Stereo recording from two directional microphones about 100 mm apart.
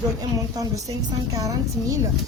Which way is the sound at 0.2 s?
40° right (ahead or behind).